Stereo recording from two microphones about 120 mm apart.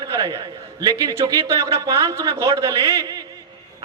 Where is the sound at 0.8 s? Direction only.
30° right (ahead or behind).